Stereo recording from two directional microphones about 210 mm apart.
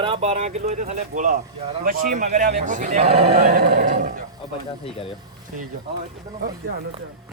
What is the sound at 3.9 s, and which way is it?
Roaring cats, 40° right (ahead or behind).